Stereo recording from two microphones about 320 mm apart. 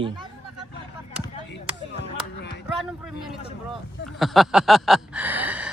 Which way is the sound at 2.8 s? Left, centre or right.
Centre.